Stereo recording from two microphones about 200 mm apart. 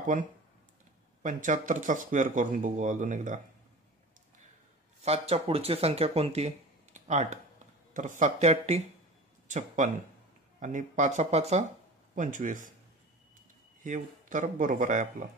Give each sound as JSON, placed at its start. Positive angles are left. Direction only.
{"t": 0.0, "sound": "speech", "side_deg": -40}
{"t": 5.0, "sound": "speech", "side_deg": -30}
{"t": 13.8, "sound": "speech", "side_deg": -40}